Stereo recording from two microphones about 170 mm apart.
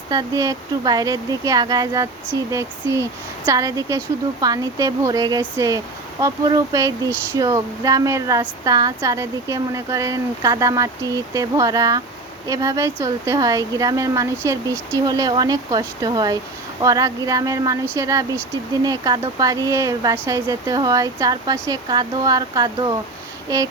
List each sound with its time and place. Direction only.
0.1 s speech: 20° right (ahead or behind)